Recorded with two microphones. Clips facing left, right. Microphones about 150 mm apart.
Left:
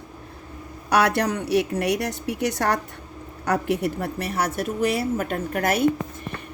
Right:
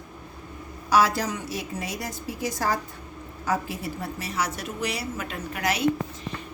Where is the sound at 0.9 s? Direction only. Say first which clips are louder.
Left 2 dB; 65° left (ahead or behind).